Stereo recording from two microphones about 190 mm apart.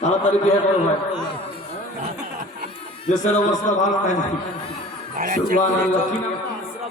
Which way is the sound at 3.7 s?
40° left (ahead or behind).